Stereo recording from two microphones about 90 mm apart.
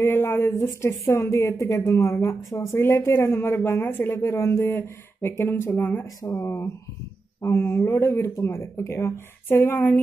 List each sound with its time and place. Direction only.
0.0 s speech: 30° left (ahead or behind)